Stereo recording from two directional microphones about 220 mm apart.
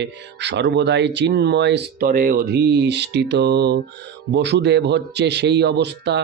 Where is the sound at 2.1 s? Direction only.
40° right (ahead or behind).